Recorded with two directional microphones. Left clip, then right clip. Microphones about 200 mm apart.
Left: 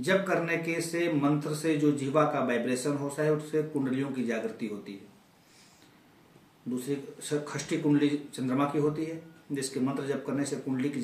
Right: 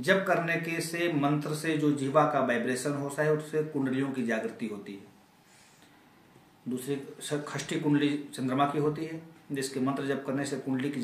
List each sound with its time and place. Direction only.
0.0 s a man's voice: centre (ahead or behind)
6.8 s a man's voice: centre (ahead or behind)